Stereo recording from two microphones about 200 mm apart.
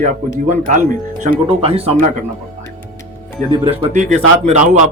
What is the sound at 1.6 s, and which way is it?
Speech, 30° right (ahead or behind).